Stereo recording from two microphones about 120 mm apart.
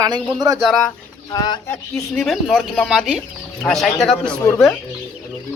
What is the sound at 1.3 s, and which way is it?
Speech, 35° left (ahead or behind).